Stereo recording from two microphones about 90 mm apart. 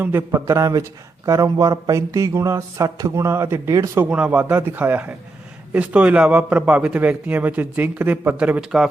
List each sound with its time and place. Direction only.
0.0 s a man's voice: 25° right (ahead or behind)
4.1 s a man's voice: 15° right (ahead or behind)